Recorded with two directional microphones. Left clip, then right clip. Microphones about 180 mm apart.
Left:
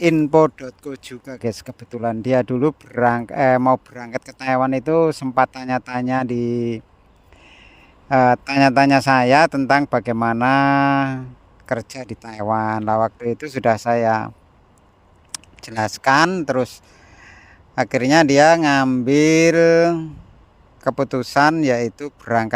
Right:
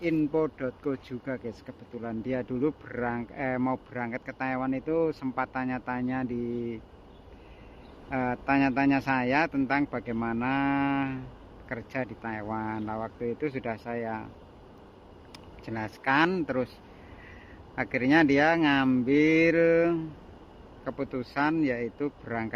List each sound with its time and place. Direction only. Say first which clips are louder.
0.3 s speech: left 13 dB; 50° left (ahead or behind)
8.1 s speech: left 13 dB; 45° left (ahead or behind)
15.3 s speech: left 5 dB; 45° left (ahead or behind)
17.7 s speech: left 9 dB; 40° left (ahead or behind)